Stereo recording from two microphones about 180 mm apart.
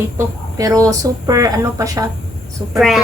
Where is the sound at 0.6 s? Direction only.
20° right (ahead or behind).